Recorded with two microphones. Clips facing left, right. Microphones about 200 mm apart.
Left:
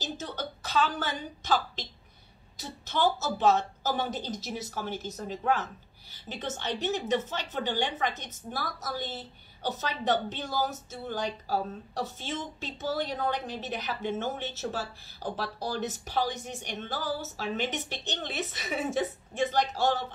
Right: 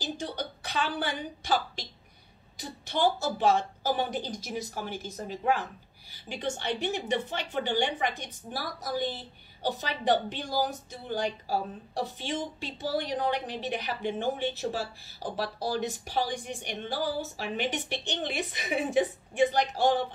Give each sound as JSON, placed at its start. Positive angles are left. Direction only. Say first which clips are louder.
{"t": 0.0, "sound": "a sound", "louder": "right 2 dB", "side_deg": -15}
{"t": 0.9, "sound": "a woman's voice", "louder": "right 2 dB", "side_deg": -10}
{"t": 2.9, "sound": "a woman's voice", "louder": "right 1 dB", "side_deg": -15}